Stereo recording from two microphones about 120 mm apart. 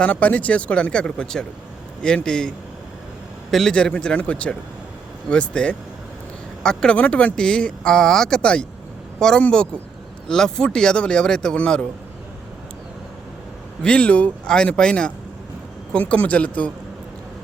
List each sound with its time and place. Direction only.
0.0 s speech: 10° left (ahead or behind)
3.5 s speech: 5° left (ahead or behind)
13.8 s speech: 10° left (ahead or behind)